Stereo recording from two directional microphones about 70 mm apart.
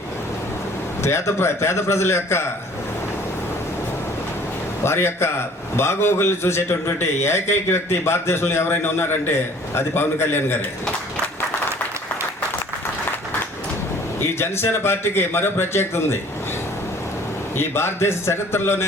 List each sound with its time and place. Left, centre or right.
1.0 s a man's voice: left
4.8 s a man's voice: left
14.3 s a man's voice: left
17.6 s a man's voice: left